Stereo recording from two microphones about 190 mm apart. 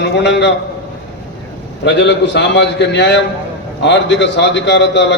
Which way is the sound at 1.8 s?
70° left (ahead or behind).